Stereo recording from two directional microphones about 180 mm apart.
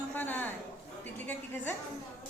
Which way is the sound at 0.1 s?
10° left (ahead or behind).